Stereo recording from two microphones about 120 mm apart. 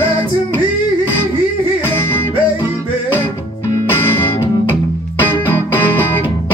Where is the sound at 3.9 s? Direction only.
15° left (ahead or behind).